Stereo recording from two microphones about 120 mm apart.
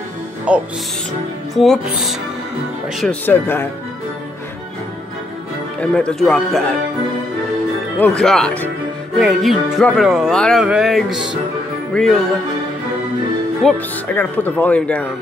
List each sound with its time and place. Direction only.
0.5 s speech: 10° right (ahead or behind)
3.3 s speech: 20° left (ahead or behind)
5.8 s speech: 10° left (ahead or behind)
8.0 s speech: 5° left (ahead or behind)
13.7 s speech: 15° left (ahead or behind)